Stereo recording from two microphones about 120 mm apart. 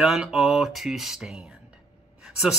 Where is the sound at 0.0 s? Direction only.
5° right (ahead or behind).